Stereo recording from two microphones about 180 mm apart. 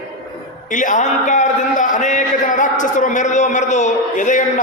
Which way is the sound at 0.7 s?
45° left (ahead or behind).